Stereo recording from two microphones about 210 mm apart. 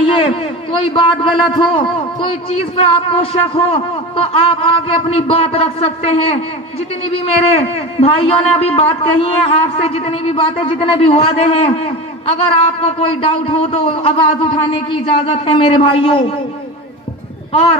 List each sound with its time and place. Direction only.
0.0 s a sound: 25° left (ahead or behind)
0.9 s a man's voice: 25° left (ahead or behind)
3.2 s a man's voice: 25° left (ahead or behind)
12.8 s a man's voice: 25° left (ahead or behind)
17.5 s a child's voice: 30° left (ahead or behind)